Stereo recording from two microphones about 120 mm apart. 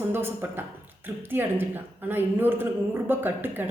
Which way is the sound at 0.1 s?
20° right (ahead or behind).